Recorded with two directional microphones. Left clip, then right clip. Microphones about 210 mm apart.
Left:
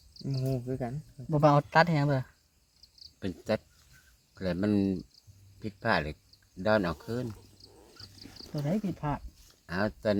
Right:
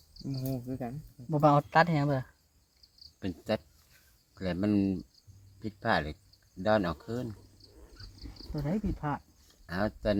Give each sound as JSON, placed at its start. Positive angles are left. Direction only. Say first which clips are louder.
{"t": 0.4, "sound": "speech", "louder": "left 4 dB", "side_deg": 40}
{"t": 1.3, "sound": "speech", "louder": "left 1 dB", "side_deg": 5}
{"t": 3.2, "sound": "speech", "louder": "left 1 dB", "side_deg": 15}
{"t": 7.6, "sound": "cat", "louder": "left 3 dB", "side_deg": 35}
{"t": 9.0, "sound": "speech", "louder": "even", "side_deg": 0}
{"t": 9.6, "sound": "speech", "louder": "left 1 dB", "side_deg": 10}